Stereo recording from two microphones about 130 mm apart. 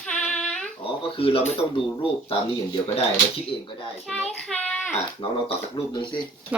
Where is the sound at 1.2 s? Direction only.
45° left (ahead or behind).